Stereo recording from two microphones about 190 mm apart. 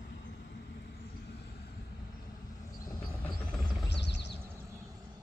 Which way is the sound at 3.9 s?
65° left (ahead or behind).